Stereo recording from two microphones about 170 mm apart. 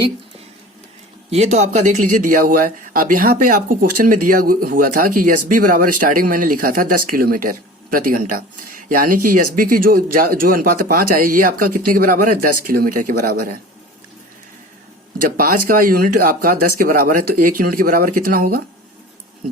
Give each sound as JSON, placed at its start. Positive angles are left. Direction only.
{"t": 1.3, "sound": "speech", "side_deg": -40}
{"t": 15.2, "sound": "speech", "side_deg": -55}